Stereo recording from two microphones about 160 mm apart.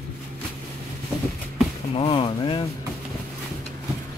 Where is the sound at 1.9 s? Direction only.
35° left (ahead or behind).